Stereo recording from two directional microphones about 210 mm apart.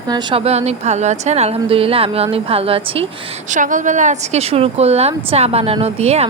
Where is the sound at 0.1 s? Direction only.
20° right (ahead or behind).